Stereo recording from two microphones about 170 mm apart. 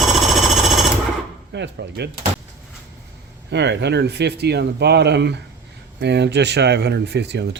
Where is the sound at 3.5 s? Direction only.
90° right.